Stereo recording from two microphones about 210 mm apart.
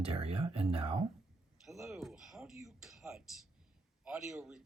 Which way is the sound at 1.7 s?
Centre (ahead or behind).